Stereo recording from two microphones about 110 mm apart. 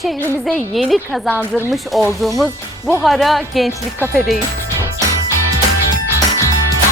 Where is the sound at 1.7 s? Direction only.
Centre (ahead or behind).